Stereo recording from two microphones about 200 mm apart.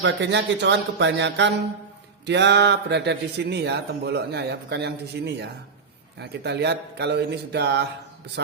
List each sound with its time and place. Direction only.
0.0 s speech: 60° right (ahead or behind)